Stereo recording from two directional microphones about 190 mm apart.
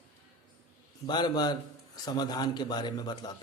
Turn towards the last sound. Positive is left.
turn(degrees=20)  # may be behind; listen again after turning